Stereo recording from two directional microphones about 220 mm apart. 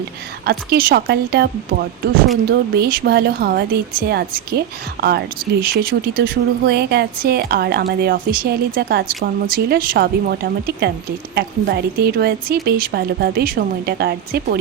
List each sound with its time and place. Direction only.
0.4 s speech: 45° right (ahead or behind)
2.5 s speech: 45° right (ahead or behind)